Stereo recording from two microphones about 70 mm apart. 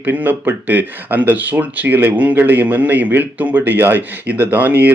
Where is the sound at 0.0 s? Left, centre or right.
Right.